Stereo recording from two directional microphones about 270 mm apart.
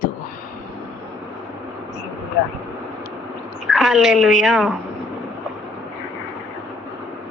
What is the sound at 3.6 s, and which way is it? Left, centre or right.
A woman's voice, centre.